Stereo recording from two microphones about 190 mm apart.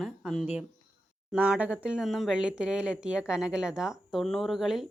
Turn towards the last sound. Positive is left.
turn(degrees=0)  # may be behind; listen again after turning